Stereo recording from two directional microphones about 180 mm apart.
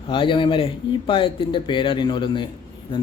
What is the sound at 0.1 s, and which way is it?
Speech, 25° left (ahead or behind).